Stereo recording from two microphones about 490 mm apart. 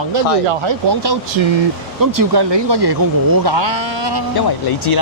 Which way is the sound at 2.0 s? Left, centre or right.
Right.